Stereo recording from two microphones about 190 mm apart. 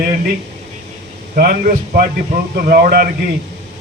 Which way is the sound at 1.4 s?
50° right (ahead or behind).